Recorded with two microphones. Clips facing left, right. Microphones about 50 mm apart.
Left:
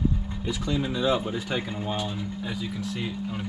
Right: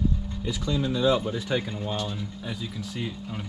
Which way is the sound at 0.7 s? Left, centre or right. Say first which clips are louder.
Right 2 dB; centre.